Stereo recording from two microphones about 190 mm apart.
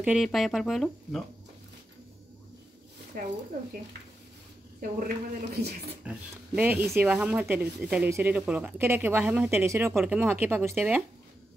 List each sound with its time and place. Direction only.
0.0 s speech: centre (ahead or behind)
4.7 s a woman's voice: 45° right (ahead or behind)
5.5 s speech: 55° right (ahead or behind)
6.0 s speech: 5° right (ahead or behind)